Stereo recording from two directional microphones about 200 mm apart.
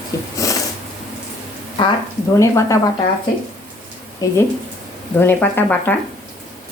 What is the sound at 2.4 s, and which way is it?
Speech, 15° left (ahead or behind).